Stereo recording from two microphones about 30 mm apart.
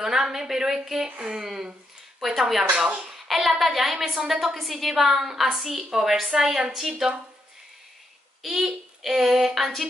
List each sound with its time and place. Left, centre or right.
0.0 s a woman's voice: centre
8.5 s a woman's voice: centre